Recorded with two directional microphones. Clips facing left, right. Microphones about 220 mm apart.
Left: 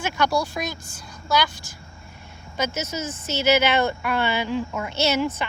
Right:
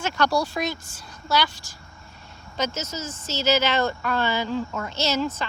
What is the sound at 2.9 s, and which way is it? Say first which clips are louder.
A woman's voice: left 3 dB; 20° left (ahead or behind).